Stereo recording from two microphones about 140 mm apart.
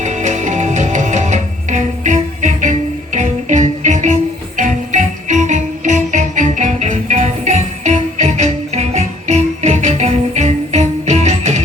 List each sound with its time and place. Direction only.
0.0 s music: 60° right (ahead or behind)